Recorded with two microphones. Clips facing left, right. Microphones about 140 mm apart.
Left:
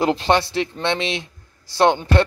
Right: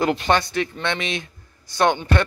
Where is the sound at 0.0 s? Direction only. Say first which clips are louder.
Left 2 dB; 25° left (ahead or behind).